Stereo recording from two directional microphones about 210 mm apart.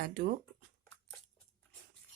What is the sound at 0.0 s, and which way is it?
Speech, 45° right (ahead or behind).